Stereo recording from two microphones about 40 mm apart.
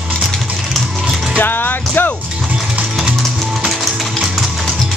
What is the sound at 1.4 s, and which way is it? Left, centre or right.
Music, left.